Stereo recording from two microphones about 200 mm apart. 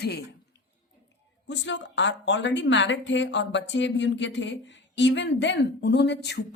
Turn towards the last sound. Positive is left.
turn(degrees=55)  # may be behind; listen again after turning